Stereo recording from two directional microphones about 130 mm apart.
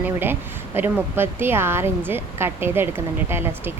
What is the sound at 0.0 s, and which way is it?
A woman's voice, 15° right (ahead or behind).